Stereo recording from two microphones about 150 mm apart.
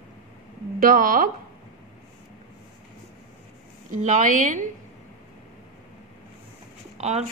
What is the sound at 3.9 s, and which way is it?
Speech, 55° right (ahead or behind).